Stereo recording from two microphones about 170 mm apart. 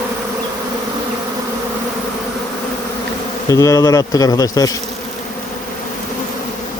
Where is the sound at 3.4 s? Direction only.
20° left (ahead or behind).